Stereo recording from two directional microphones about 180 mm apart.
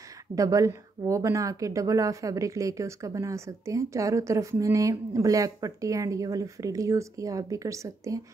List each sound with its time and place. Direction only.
0.4 s a woman's voice: 20° right (ahead or behind)